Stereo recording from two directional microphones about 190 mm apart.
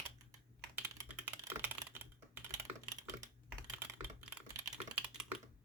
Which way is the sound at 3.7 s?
10° right (ahead or behind).